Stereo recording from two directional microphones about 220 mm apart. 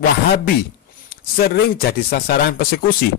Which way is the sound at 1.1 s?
45° left (ahead or behind).